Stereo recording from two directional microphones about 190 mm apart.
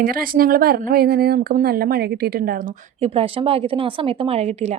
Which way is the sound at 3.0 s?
30° right (ahead or behind).